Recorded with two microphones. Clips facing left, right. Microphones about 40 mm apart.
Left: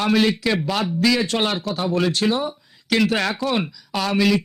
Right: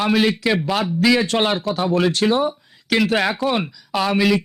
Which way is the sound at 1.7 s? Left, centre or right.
Right.